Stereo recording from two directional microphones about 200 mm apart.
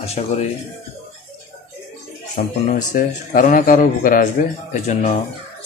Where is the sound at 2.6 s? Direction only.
40° left (ahead or behind).